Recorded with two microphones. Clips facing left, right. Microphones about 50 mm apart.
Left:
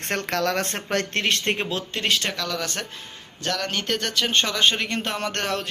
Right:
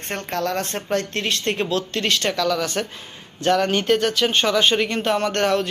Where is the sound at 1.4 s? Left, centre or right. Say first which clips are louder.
Right 3 dB; left.